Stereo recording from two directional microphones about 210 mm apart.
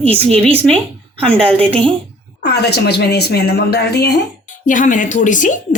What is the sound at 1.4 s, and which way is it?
Speech, 25° right (ahead or behind).